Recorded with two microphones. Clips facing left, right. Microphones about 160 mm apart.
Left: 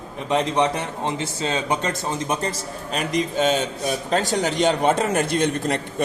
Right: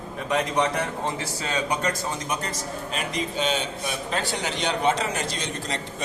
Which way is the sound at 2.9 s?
45° left (ahead or behind).